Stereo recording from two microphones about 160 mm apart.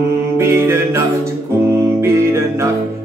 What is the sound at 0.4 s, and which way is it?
Mantra, 15° right (ahead or behind).